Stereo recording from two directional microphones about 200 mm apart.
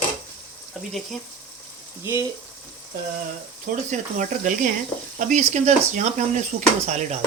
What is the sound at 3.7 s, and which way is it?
Speech, 45° right (ahead or behind).